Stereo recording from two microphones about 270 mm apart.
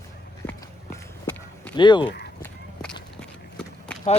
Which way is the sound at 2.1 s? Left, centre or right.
Left.